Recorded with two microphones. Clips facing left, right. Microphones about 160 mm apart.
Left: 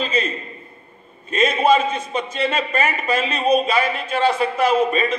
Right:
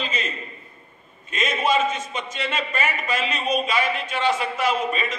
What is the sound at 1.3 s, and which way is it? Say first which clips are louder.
A man's voice: left 6 dB; 30° left (ahead or behind).